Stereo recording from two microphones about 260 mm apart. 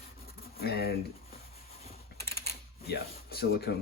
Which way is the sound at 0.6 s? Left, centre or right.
Left.